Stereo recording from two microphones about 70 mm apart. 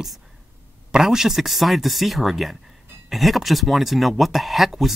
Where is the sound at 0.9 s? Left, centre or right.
Centre.